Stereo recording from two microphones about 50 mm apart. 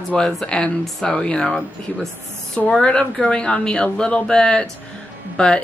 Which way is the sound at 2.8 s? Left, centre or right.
Centre.